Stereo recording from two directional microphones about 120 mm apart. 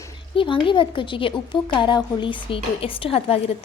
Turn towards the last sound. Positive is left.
turn(degrees=50)  # may be behind; listen again after turning